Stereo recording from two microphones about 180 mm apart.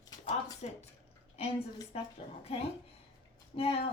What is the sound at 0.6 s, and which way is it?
Speech, 40° left (ahead or behind).